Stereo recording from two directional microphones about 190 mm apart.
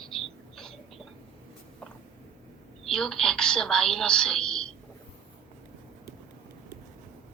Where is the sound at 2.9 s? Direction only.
5° left (ahead or behind).